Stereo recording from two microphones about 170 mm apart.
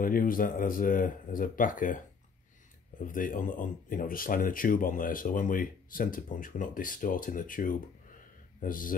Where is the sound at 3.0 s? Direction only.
55° left (ahead or behind).